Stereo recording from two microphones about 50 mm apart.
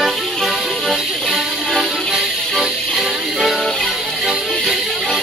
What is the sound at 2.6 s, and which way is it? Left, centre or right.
Music, centre.